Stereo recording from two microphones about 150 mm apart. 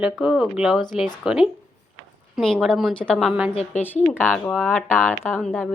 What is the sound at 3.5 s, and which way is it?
Speech, 45° left (ahead or behind).